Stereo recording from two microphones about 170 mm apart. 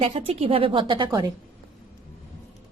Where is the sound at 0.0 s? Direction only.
35° right (ahead or behind).